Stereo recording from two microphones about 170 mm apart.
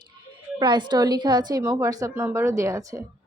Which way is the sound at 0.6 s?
25° right (ahead or behind).